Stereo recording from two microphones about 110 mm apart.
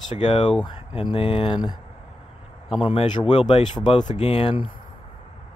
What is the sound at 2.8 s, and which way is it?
Speech, 65° left (ahead or behind).